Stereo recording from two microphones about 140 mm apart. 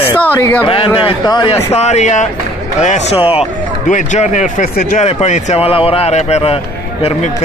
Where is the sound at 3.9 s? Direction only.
55° left (ahead or behind).